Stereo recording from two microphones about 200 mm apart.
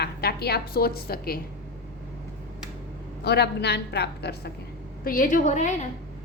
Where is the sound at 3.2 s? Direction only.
55° left (ahead or behind).